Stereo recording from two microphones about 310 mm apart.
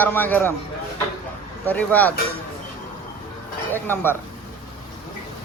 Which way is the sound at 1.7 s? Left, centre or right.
Centre.